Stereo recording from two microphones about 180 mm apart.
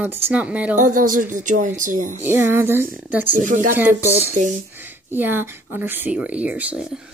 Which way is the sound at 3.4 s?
45° right (ahead or behind).